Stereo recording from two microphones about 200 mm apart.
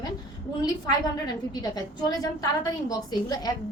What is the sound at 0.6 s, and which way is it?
A woman's voice, 20° left (ahead or behind).